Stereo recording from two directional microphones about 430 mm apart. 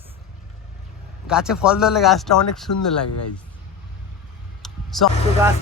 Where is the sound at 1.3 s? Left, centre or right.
Centre.